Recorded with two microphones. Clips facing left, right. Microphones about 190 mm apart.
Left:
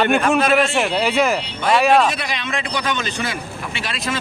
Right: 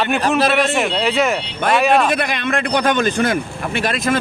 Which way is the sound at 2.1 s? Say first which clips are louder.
Right 6 dB; 55° right (ahead or behind).